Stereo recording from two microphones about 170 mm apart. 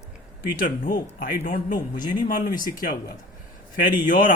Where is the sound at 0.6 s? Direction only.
55° left (ahead or behind).